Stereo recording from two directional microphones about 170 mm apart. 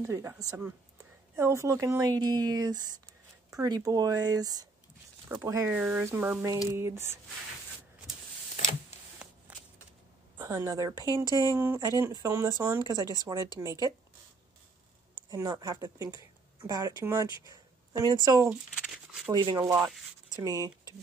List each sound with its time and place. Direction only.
0.0 s speech: 15° right (ahead or behind)
9.5 s shuffling cards: 10° right (ahead or behind)
10.4 s speech: 20° right (ahead or behind)
11.2 s speech: 20° left (ahead or behind)
11.5 s speech: 15° right (ahead or behind)
15.2 s speech: 20° right (ahead or behind)
18.5 s a sound: 5° right (ahead or behind)
19.3 s speech: 25° right (ahead or behind)